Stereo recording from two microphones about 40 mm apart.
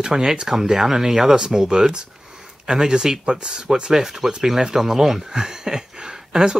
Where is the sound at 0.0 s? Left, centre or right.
Centre.